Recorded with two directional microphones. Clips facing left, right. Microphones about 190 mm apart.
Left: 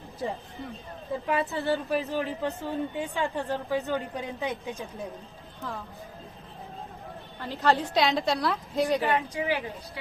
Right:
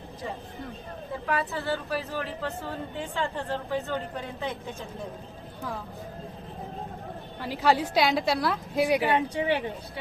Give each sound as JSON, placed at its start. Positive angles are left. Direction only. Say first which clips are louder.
{"t": 1.3, "sound": "a woman's voice", "louder": "left 2 dB", "side_deg": 20}
{"t": 7.4, "sound": "a woman's voice", "louder": "right 1 dB", "side_deg": -10}
{"t": 8.9, "sound": "speech", "louder": "right 2 dB", "side_deg": -15}
{"t": 9.1, "sound": "speech", "louder": "right 2 dB", "side_deg": -30}